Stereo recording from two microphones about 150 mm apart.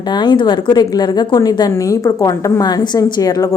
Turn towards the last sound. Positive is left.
turn(degrees=25)  # may be behind; listen again after turning